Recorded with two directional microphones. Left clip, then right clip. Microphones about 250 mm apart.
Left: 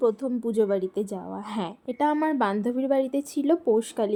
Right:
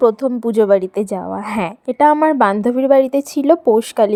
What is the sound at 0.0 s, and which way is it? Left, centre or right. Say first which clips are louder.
A woman's voice: right 10 dB; right.